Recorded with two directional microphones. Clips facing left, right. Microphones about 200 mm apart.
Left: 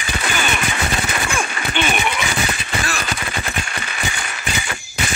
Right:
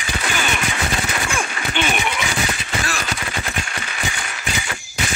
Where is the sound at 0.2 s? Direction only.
55° left (ahead or behind).